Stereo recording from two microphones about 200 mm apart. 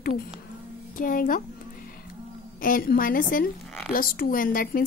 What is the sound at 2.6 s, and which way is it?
Speech, 45° left (ahead or behind).